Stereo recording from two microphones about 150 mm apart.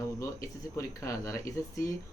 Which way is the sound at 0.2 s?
20° left (ahead or behind).